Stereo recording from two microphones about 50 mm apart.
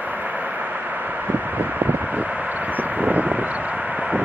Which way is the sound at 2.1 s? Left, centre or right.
Centre.